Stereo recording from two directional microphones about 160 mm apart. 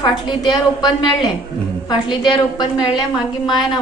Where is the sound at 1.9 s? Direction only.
30° left (ahead or behind).